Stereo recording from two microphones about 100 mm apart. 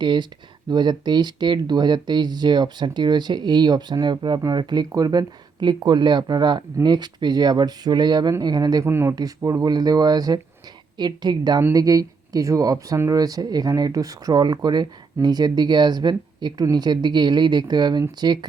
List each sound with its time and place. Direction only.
0.0 s speech: 50° right (ahead or behind)
8.8 s speech: 25° right (ahead or behind)
9.1 s speech: 40° right (ahead or behind)